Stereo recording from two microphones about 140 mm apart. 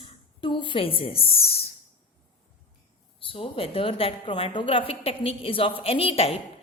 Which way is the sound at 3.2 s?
40° left (ahead or behind).